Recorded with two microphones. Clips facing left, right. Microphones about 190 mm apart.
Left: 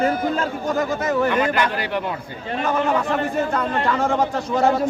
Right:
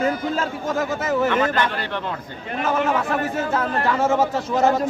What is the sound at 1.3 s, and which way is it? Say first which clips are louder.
Speech: left 1 dB; 10° left (ahead or behind).